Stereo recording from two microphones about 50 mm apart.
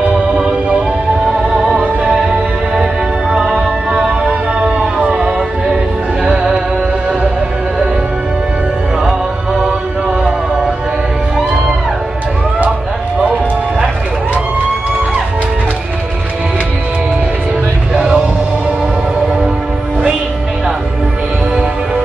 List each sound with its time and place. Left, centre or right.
0.4 s music: right
2.0 s music: centre
4.3 s a sound: right
5.1 s music: centre
9.0 s music: centre
17.9 s music: centre